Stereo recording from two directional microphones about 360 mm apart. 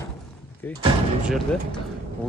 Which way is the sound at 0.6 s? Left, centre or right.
Centre.